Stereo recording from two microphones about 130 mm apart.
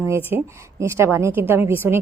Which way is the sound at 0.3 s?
20° right (ahead or behind).